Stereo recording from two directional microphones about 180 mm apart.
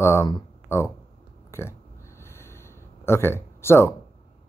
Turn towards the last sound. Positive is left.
turn(degrees=15)  # may be behind; listen again after turning